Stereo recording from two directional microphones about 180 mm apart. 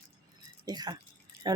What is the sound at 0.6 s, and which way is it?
Speech, 20° right (ahead or behind).